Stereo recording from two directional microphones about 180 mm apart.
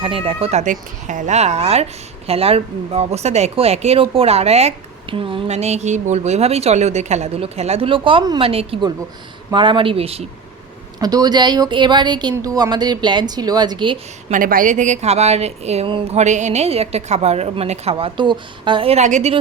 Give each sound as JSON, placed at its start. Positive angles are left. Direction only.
{"t": 0.0, "sound": "speech", "side_deg": -30}
{"t": 11.0, "sound": "speech", "side_deg": -20}
{"t": 14.3, "sound": "speech", "side_deg": -50}